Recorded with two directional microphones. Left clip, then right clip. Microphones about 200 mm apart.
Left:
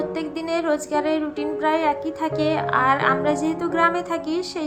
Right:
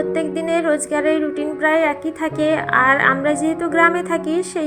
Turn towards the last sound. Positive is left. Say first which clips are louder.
# right 5 dB
turn(degrees=-15)  # may be behind; listen again after turning